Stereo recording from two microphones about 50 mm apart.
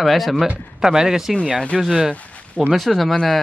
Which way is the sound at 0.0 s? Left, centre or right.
Centre.